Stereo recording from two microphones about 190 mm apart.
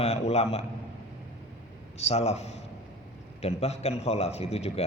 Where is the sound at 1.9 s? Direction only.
35° left (ahead or behind).